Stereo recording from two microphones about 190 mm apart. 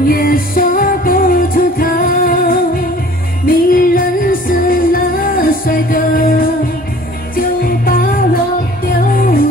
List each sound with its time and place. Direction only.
0.0 s music: 50° left (ahead or behind)